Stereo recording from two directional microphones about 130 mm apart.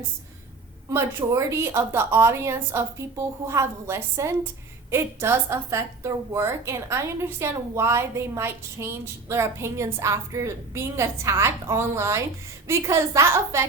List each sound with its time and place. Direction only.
0.9 s a woman's voice: 20° right (ahead or behind)